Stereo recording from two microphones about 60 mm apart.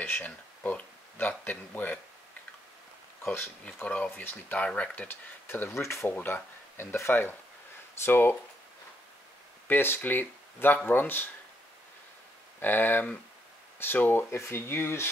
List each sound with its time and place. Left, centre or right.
0.0 s speech: left
3.6 s speech: left
4.2 s speech: left
4.6 s speech: centre
4.9 s speech: left
6.1 s speech: left
9.7 s speech: left
12.5 s speech: left
14.3 s speech: left